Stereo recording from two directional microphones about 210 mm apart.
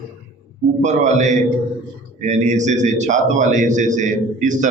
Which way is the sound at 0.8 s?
35° right (ahead or behind).